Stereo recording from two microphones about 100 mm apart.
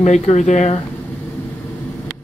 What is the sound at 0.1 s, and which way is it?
Speech, 90° left.